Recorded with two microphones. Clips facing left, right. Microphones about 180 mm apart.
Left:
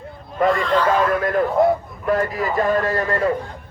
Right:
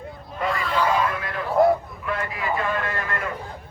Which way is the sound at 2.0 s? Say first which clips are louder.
Left 7 dB; 40° left (ahead or behind).